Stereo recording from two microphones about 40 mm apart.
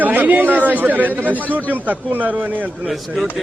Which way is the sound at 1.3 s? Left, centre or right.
Left.